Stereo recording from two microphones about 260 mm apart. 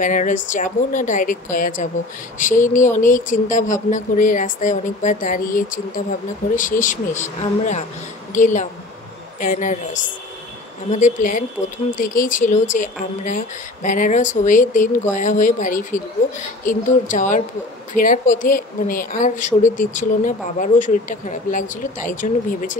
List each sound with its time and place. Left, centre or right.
0.0 s speech: left
8.3 s a woman's voice: left
10.9 s speech: left